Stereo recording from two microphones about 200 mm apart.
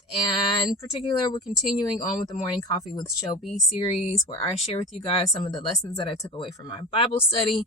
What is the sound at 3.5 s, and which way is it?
Speech, 35° left (ahead or behind).